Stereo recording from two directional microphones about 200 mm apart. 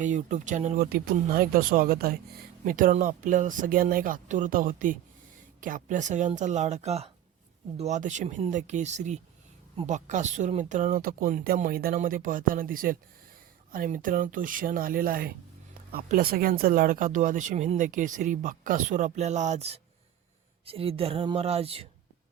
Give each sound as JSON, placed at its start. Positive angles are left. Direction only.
{"t": 0.0, "sound": "speech", "side_deg": -40}
{"t": 0.9, "sound": "speech", "side_deg": -50}